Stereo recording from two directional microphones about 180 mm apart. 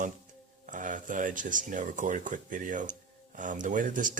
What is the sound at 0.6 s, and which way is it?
Speech, 45° right (ahead or behind).